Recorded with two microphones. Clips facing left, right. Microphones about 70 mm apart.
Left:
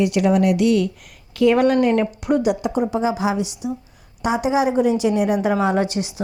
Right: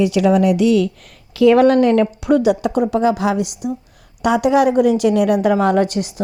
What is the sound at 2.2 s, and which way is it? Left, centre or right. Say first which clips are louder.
A woman's voice: right 4 dB; right.